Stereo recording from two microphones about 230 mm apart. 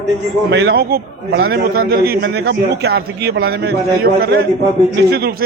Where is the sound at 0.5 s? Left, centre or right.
Right.